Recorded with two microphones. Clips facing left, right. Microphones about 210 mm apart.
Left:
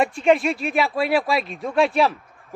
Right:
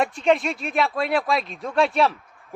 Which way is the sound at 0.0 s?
Centre (ahead or behind).